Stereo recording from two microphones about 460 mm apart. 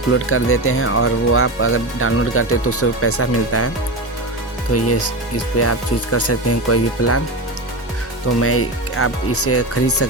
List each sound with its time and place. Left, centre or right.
0.1 s speech: left
4.7 s speech: left
8.4 s speech: left